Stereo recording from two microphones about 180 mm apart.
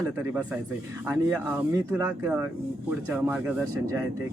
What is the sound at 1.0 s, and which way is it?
Speech, 10° right (ahead or behind).